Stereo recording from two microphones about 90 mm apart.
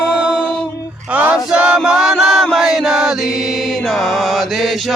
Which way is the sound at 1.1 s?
15° right (ahead or behind).